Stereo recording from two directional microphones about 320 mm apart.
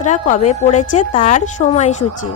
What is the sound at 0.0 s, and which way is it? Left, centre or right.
A woman's voice, left.